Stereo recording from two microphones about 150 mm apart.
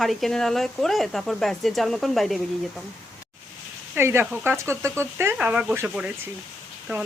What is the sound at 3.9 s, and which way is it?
Speech, 15° right (ahead or behind).